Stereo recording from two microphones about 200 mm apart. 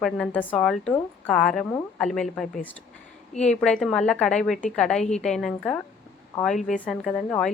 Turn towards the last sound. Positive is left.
turn(degrees=5)  # may be behind; listen again after turning